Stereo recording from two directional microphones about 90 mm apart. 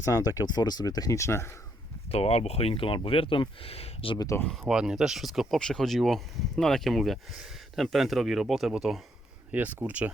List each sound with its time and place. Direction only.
0.0 s speech: 40° left (ahead or behind)
2.1 s speech: 90° left
4.5 s speech: 5° right (ahead or behind)
9.5 s speech: 20° right (ahead or behind)